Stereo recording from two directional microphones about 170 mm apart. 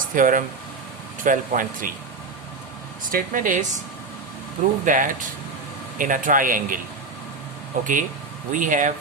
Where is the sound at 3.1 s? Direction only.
50° right (ahead or behind).